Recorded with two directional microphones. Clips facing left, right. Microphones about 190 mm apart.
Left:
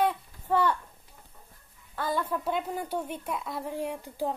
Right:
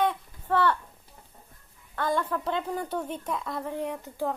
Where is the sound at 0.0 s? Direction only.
10° left (ahead or behind).